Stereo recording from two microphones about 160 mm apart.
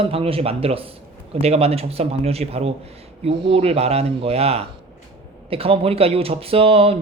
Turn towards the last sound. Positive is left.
turn(degrees=-35)  # may be behind; listen again after turning